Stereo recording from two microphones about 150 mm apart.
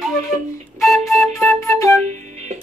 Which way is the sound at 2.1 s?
50° right (ahead or behind).